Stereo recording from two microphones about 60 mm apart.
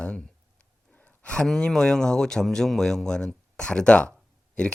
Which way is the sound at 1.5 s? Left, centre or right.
Centre.